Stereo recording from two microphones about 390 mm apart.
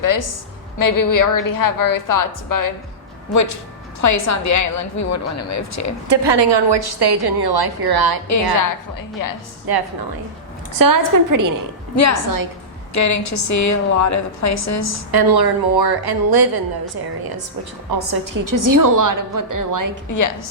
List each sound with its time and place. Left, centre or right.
0.0 s a woman's voice: left
6.1 s a woman's voice: right
9.2 s a woman's voice: left
9.7 s a woman's voice: right
10.8 s a woman's voice: right
12.9 s a woman's voice: left
15.1 s a woman's voice: right
20.1 s a woman's voice: left